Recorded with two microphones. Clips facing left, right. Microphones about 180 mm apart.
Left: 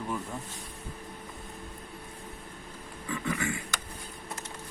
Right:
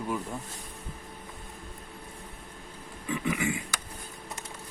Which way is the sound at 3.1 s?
15° right (ahead or behind).